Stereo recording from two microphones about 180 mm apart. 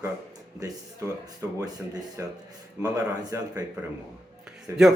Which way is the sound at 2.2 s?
15° right (ahead or behind).